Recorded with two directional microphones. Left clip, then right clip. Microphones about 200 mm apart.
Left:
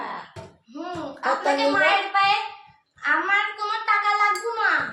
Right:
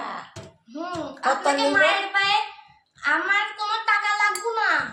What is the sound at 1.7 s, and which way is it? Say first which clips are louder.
Speech: even; 15° left (ahead or behind).